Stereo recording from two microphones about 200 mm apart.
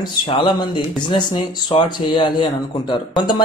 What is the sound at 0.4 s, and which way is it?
Speech, 20° left (ahead or behind).